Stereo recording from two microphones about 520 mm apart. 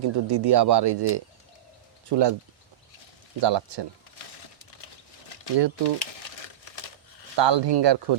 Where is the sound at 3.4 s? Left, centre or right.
Right.